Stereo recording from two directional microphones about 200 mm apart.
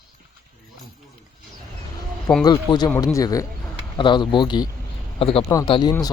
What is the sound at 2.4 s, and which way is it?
Speech, 20° left (ahead or behind).